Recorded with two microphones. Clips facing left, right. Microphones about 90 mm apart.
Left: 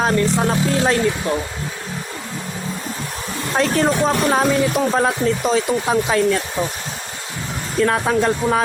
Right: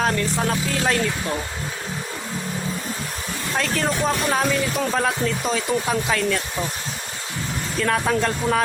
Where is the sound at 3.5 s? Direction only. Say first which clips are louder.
Left 6 dB; 30° left (ahead or behind).